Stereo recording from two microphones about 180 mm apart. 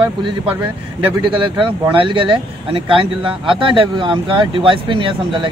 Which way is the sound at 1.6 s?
30° right (ahead or behind).